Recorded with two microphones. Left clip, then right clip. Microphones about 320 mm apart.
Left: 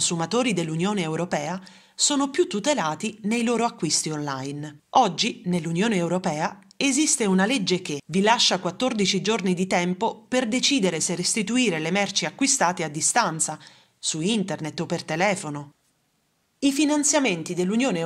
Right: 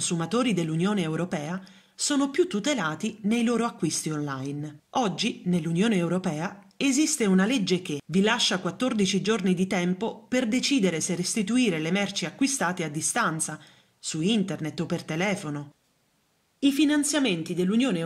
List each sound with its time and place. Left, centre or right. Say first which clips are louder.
0.0 s speech: left 3 dB; centre